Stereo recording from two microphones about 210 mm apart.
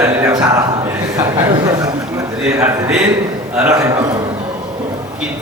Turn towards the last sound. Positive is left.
turn(degrees=-15)  # may be behind; listen again after turning